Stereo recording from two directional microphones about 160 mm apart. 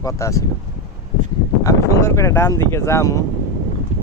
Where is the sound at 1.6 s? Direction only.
20° left (ahead or behind).